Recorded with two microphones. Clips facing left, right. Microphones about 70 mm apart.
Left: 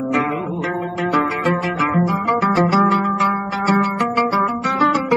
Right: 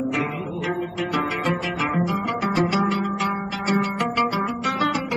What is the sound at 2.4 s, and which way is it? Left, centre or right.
Music, left.